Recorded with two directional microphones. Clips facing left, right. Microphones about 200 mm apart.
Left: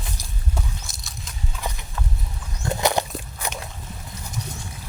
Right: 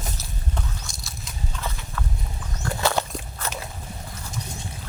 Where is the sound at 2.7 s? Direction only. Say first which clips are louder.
Left 2 dB; 15° left (ahead or behind).